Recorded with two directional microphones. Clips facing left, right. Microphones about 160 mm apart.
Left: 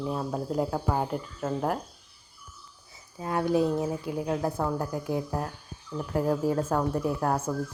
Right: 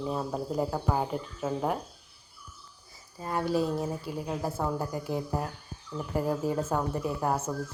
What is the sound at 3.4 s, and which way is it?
Speech, 15° left (ahead or behind).